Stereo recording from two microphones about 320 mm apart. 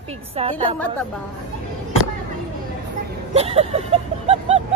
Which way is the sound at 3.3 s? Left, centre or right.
Centre.